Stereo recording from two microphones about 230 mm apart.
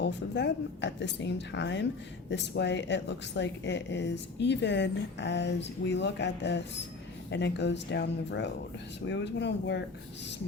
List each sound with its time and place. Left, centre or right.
0.0 s a woman's voice: left